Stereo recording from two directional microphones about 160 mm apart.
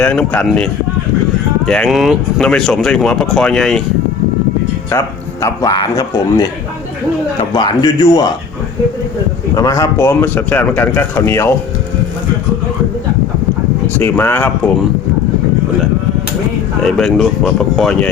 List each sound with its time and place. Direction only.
0.0 s speech: 10° left (ahead or behind)
4.9 s speech: 20° left (ahead or behind)
7.5 s speech: 25° left (ahead or behind)
9.6 s speech: 20° left (ahead or behind)
13.9 s speech: 15° left (ahead or behind)
16.8 s speech: centre (ahead or behind)